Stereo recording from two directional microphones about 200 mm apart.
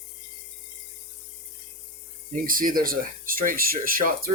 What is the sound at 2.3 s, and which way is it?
Speech, 45° right (ahead or behind).